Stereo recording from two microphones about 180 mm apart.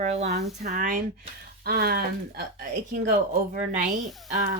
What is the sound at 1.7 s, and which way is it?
Speech, 60° right (ahead or behind).